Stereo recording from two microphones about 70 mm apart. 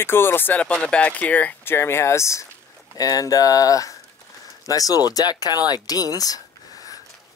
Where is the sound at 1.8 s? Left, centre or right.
Left.